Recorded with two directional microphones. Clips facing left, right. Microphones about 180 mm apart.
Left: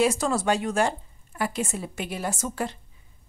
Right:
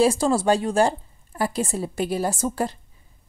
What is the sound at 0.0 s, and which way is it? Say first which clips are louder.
Speech: right 4 dB; 30° right (ahead or behind).